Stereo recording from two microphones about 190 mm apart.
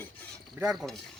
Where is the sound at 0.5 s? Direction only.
Centre (ahead or behind).